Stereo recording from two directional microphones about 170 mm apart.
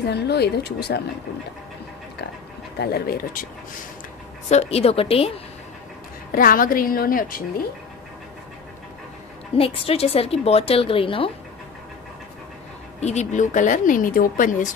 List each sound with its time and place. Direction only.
0.0 s speech: 75° left (ahead or behind)
2.8 s a woman's voice: 65° left (ahead or behind)
4.5 s a woman's voice: 40° left (ahead or behind)
6.3 s a woman's voice: 55° left (ahead or behind)
9.6 s a woman's voice: 35° left (ahead or behind)
13.0 s speech: 40° left (ahead or behind)